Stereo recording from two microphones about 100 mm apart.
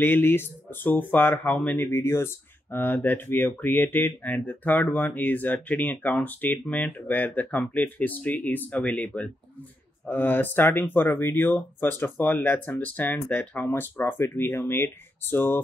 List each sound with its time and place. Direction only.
0.0 s speech: 20° left (ahead or behind)